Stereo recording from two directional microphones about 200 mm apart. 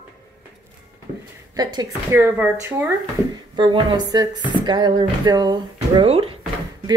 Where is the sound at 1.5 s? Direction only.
20° right (ahead or behind).